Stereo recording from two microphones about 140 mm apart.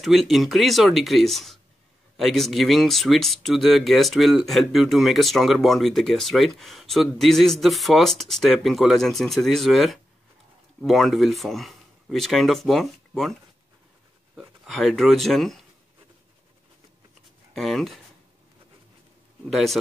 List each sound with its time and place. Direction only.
0.0 s speech: centre (ahead or behind)
14.3 s speech: 5° right (ahead or behind)
17.6 s speech: centre (ahead or behind)
19.5 s speech: centre (ahead or behind)